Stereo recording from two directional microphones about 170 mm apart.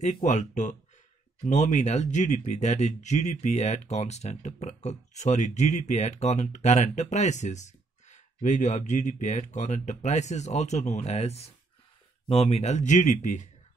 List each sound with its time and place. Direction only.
0.0 s speech: 45° left (ahead or behind)